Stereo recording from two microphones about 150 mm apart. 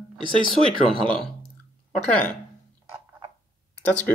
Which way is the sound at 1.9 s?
10° left (ahead or behind).